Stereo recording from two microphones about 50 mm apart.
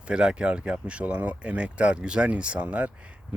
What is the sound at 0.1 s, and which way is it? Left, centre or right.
Speech, centre.